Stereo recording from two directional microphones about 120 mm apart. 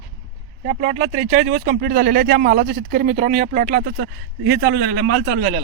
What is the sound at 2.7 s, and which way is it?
Speech, 90° right.